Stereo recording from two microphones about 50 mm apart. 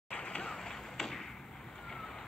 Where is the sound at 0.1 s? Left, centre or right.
Left.